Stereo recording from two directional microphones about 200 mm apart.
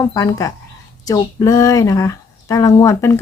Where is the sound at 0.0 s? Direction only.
15° left (ahead or behind).